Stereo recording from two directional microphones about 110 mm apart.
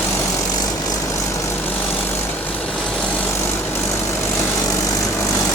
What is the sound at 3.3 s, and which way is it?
Vehicle, 20° left (ahead or behind).